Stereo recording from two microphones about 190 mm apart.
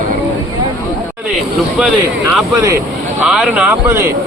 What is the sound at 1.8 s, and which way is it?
Speech, 5° right (ahead or behind).